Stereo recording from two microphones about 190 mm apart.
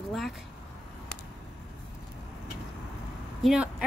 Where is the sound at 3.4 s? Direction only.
5° right (ahead or behind).